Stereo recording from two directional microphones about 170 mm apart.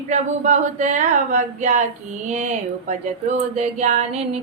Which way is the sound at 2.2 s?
40° right (ahead or behind).